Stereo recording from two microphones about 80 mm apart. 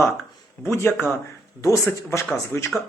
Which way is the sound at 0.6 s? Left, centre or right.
Left.